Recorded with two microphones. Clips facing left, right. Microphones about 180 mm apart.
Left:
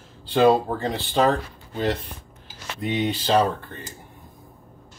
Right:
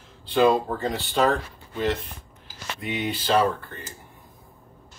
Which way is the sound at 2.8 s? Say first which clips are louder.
Left 5 dB; 30° left (ahead or behind).